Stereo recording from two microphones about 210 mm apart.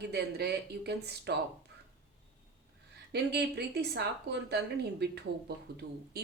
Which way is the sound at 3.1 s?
50° right (ahead or behind).